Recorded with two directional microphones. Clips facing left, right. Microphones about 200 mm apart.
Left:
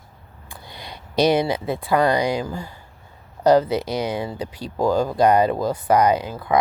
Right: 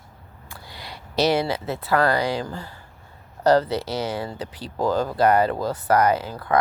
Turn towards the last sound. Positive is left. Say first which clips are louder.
# left 2 dB
turn(degrees=10)  # may be behind; listen again after turning